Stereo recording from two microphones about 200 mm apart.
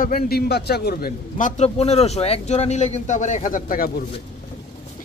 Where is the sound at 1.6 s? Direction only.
30° left (ahead or behind).